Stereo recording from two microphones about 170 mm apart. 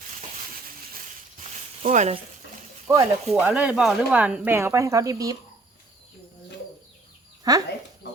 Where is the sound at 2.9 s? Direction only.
15° right (ahead or behind).